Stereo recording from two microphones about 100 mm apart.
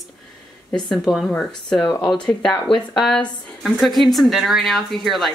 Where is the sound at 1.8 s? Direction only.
40° left (ahead or behind).